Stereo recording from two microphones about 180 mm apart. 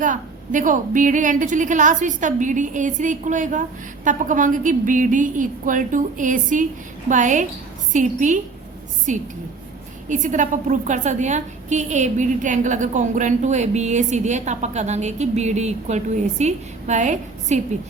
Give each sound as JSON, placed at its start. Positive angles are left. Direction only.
{"t": 0.0, "sound": "a woman's voice", "side_deg": -45}